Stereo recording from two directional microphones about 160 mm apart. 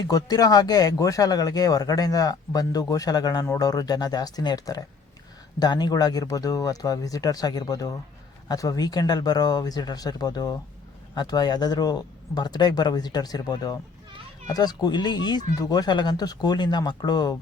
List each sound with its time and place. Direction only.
0.1 s speech: 25° left (ahead or behind)